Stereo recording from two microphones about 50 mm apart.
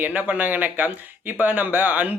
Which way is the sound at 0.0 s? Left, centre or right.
Right.